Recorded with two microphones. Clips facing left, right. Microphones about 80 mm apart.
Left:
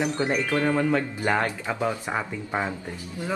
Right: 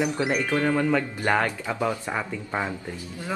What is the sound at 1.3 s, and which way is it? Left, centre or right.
Speech, centre.